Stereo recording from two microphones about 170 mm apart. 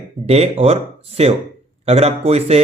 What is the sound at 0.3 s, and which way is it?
A man's voice, 35° right (ahead or behind).